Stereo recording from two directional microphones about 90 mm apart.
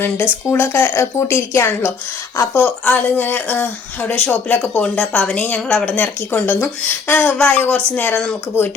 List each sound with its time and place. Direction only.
0.5 s speech: 20° left (ahead or behind)
2.5 s a woman's voice: 10° left (ahead or behind)
6.3 s speech: 25° left (ahead or behind)
7.1 s a woman's voice: 15° left (ahead or behind)